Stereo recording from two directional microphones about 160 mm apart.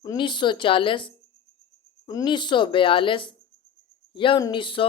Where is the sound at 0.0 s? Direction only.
25° left (ahead or behind).